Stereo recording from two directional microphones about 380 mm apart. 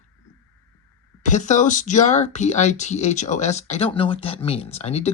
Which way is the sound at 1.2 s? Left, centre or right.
Centre.